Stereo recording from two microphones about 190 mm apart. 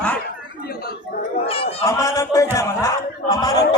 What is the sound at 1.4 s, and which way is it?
Speech, 30° left (ahead or behind).